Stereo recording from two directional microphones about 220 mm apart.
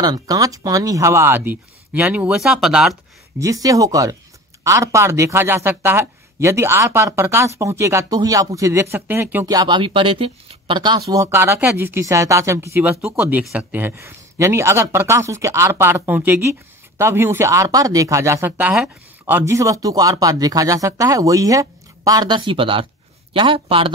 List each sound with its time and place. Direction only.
0.0 s speech: 15° right (ahead or behind)
3.3 s speech: 15° right (ahead or behind)